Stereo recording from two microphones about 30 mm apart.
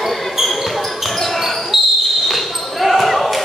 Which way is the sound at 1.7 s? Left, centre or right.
Centre.